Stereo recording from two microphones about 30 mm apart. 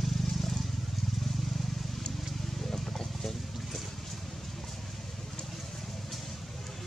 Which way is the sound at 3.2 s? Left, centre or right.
Centre.